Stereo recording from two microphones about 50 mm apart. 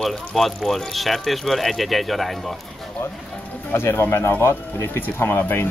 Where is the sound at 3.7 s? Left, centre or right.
Left.